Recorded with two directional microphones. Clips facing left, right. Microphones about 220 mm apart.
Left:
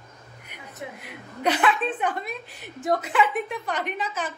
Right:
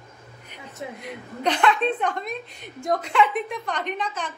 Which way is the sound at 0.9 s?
5° left (ahead or behind).